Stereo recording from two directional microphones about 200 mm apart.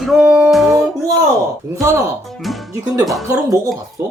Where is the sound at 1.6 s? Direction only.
15° right (ahead or behind).